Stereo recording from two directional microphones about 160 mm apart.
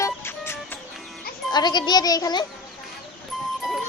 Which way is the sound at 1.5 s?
25° left (ahead or behind).